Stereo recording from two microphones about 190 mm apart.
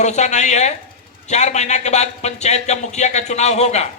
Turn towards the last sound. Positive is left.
turn(degrees=35)  # may be behind; listen again after turning